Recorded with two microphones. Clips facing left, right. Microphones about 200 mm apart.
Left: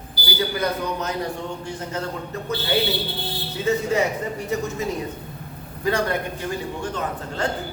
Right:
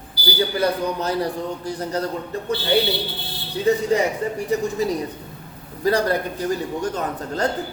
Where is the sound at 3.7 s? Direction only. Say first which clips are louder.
Right 3 dB; 35° right (ahead or behind).